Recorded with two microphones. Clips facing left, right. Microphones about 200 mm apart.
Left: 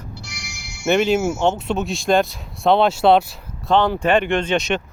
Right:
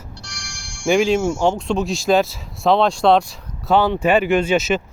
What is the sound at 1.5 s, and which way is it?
Speech, 5° left (ahead or behind).